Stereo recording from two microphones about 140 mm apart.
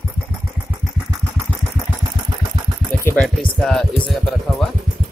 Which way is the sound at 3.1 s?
Centre (ahead or behind).